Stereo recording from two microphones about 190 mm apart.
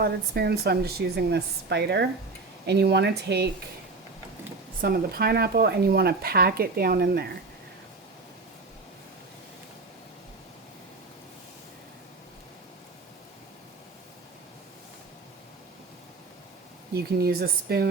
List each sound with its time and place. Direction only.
0.0 s a woman's voice: 55° right (ahead or behind)
4.8 s speech: 50° right (ahead or behind)
16.9 s a woman's voice: 55° right (ahead or behind)